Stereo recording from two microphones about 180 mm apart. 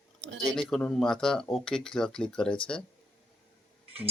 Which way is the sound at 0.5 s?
5° left (ahead or behind).